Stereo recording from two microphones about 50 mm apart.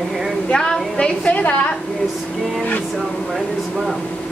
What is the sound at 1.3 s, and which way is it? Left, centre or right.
Speech, left.